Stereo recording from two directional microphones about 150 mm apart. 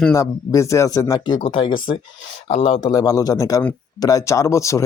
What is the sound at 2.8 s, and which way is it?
Speech, 25° left (ahead or behind).